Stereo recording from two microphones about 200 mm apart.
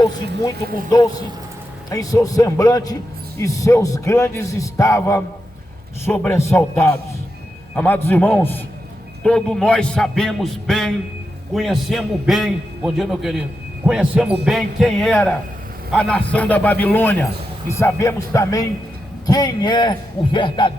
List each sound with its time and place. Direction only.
1.9 s a man's voice: 15° left (ahead or behind)